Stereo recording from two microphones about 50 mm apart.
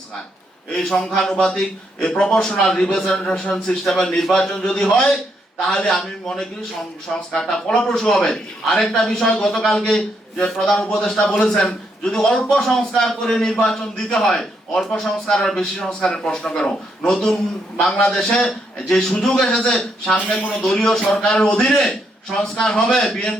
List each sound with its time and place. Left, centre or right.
0.8 s a man's voice: centre
21.3 s a man's voice: left
21.8 s a man's voice: centre